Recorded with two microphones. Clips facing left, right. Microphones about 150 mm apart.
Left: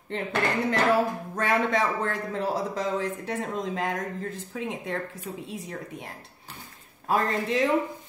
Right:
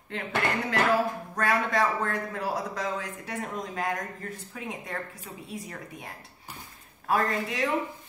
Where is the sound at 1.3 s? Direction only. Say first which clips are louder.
Left 1 dB; 25° left (ahead or behind).